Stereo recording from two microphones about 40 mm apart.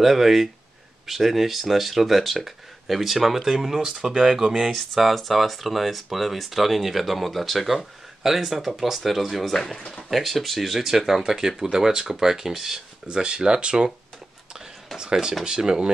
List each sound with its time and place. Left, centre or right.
0.0 s speech: centre
9.8 s speech: centre
10.0 s speech: centre
13.2 s speech: right
15.0 s speech: centre